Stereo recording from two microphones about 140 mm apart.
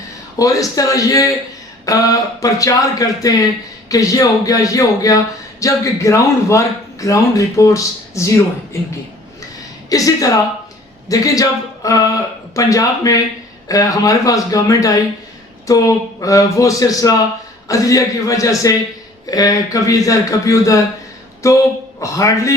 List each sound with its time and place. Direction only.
0.3 s speech: 25° left (ahead or behind)
9.9 s speech: 25° left (ahead or behind)